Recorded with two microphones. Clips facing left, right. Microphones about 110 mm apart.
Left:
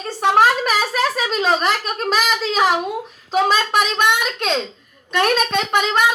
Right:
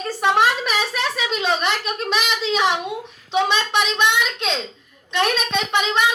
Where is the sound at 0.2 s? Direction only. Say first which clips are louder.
Left 3 dB; 40° left (ahead or behind).